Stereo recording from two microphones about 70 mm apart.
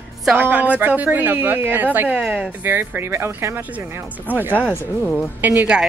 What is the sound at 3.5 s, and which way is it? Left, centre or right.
Speech, right.